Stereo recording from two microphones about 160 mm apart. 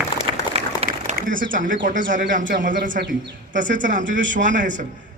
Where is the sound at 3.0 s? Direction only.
90° right.